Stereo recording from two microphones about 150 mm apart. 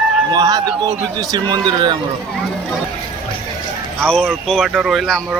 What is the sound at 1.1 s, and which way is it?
Speech, 25° right (ahead or behind).